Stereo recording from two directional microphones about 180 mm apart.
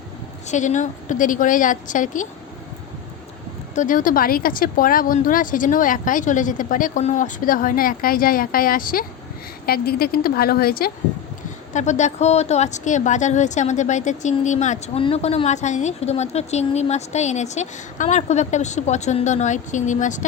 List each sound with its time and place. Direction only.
0.4 s speech: 40° left (ahead or behind)
3.8 s a woman's voice: 50° left (ahead or behind)
11.7 s a woman's voice: 40° left (ahead or behind)